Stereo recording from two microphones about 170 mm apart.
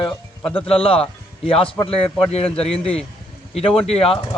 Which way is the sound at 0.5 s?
35° left (ahead or behind).